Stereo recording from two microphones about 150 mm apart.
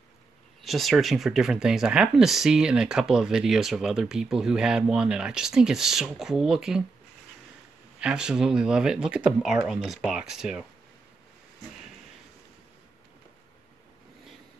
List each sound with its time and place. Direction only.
0.6 s speech: centre (ahead or behind)
8.0 s speech: 5° right (ahead or behind)